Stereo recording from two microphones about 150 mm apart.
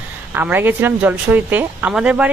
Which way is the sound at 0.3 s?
15° right (ahead or behind).